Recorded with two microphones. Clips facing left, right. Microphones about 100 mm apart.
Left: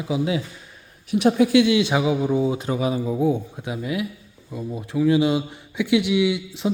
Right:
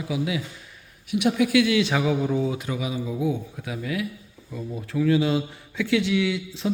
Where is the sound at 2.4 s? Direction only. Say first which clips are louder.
Left 5 dB; 30° left (ahead or behind).